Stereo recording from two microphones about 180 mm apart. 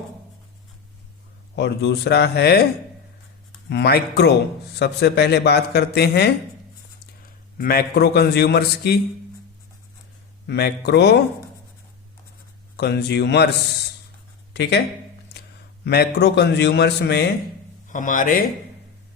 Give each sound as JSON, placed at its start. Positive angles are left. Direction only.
{"t": 1.5, "sound": "a man's voice", "side_deg": 65}
{"t": 3.7, "sound": "speech", "side_deg": 65}
{"t": 7.6, "sound": "speech", "side_deg": 55}
{"t": 10.4, "sound": "a man's voice", "side_deg": 65}
{"t": 12.7, "sound": "a man's voice", "side_deg": 65}
{"t": 14.5, "sound": "speech", "side_deg": 70}
{"t": 15.8, "sound": "a man's voice", "side_deg": 65}
{"t": 17.8, "sound": "a man's voice", "side_deg": 45}